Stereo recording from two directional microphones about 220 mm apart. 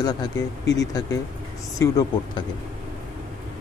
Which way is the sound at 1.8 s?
15° left (ahead or behind).